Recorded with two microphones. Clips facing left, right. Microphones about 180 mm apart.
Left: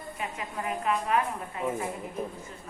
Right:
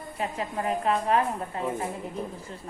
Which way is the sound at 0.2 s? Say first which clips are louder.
Right 6 dB; 35° right (ahead or behind).